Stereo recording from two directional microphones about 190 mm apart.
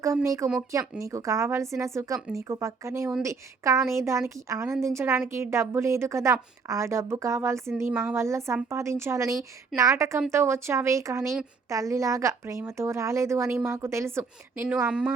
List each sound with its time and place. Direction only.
0.0 s a woman's voice: 15° right (ahead or behind)